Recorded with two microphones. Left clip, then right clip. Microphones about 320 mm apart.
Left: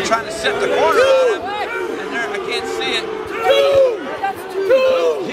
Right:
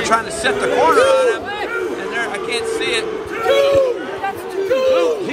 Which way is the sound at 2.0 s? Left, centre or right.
Centre.